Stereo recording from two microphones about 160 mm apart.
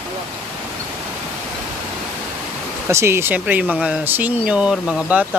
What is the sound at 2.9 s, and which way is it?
Speech, 15° right (ahead or behind).